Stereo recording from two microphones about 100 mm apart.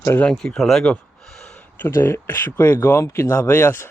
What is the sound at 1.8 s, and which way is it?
Speech, 25° left (ahead or behind).